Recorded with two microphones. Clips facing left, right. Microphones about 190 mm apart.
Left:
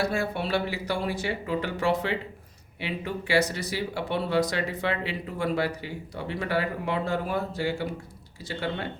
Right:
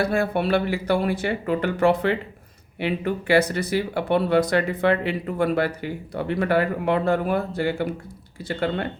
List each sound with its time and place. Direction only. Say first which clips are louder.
0.0 s speech: right 5 dB; 55° right (ahead or behind)